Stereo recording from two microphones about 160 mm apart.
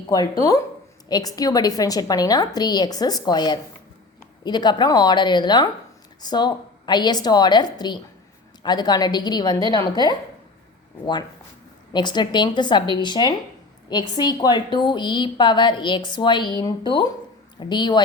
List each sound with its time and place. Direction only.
0.1 s a woman's voice: 20° left (ahead or behind)